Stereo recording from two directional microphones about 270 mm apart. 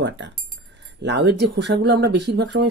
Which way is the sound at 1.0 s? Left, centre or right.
Right.